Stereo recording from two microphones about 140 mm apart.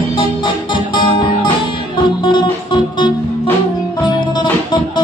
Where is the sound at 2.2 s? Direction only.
35° left (ahead or behind).